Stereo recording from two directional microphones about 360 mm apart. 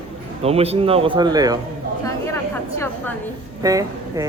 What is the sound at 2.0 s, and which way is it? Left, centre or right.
Speech, centre.